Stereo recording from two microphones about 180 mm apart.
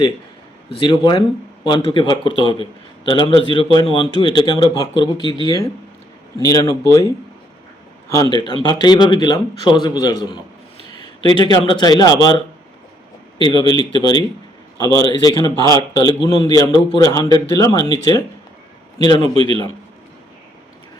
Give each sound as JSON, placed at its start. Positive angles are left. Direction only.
{"t": 0.8, "sound": "speech", "side_deg": 25}
{"t": 8.1, "sound": "speech", "side_deg": 20}
{"t": 11.3, "sound": "speech", "side_deg": 25}
{"t": 13.4, "sound": "speech", "side_deg": 25}
{"t": 19.2, "sound": "a man's voice", "side_deg": -30}